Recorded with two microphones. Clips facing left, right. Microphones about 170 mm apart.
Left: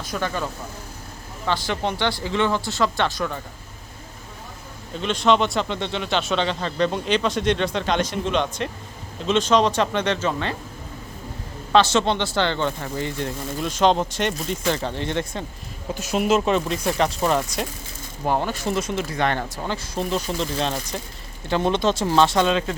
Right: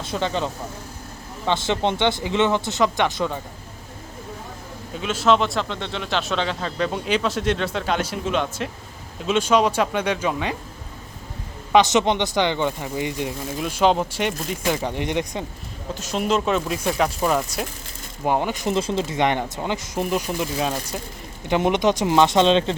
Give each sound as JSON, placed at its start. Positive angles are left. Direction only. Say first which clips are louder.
{"t": 0.0, "sound": "speech", "louder": "right 2 dB", "side_deg": -25}
{"t": 4.9, "sound": "speech", "louder": "even", "side_deg": -5}
{"t": 11.7, "sound": "speech", "louder": "right 1 dB", "side_deg": -15}
{"t": 16.0, "sound": "speech", "louder": "left 2 dB", "side_deg": 10}
{"t": 18.3, "sound": "speech", "louder": "right 1 dB", "side_deg": -15}